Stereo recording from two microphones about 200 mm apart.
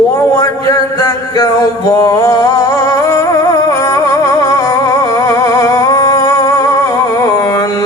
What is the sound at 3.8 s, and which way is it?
Music, 15° left (ahead or behind).